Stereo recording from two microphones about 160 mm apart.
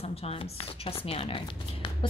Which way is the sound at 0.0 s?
40° left (ahead or behind).